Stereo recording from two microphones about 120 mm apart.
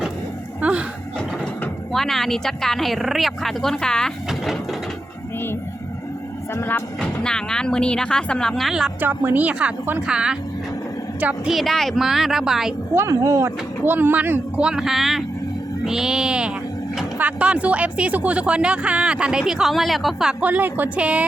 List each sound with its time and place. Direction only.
0.6 s a sound: 10° right (ahead or behind)
1.9 s speech: centre (ahead or behind)
6.5 s speech: 20° left (ahead or behind)
7.0 s speech: 5° left (ahead or behind)
9.0 s speech: 15° right (ahead or behind)
11.5 s speech: centre (ahead or behind)
12.9 s speech: 25° right (ahead or behind)
14.7 s speech: 5° right (ahead or behind)
20.4 s speech: 15° right (ahead or behind)